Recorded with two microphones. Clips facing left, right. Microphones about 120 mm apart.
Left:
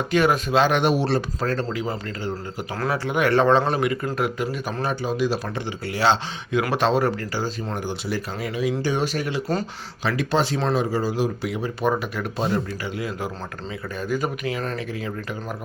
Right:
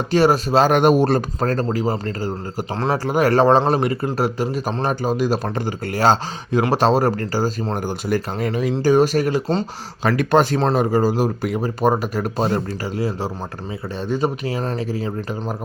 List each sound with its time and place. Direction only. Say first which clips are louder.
0.1 s a man's voice: right 4 dB; 35° right (ahead or behind)